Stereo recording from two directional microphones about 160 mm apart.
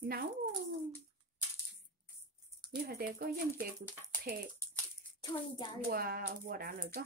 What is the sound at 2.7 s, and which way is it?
Speech, 70° right (ahead or behind).